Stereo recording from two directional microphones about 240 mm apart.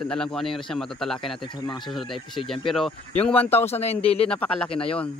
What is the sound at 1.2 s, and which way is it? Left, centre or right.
Speech, centre.